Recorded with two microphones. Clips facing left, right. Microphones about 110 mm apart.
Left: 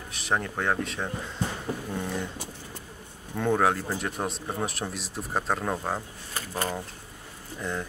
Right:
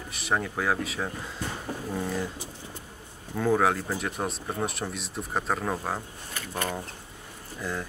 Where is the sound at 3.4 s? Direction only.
Centre (ahead or behind).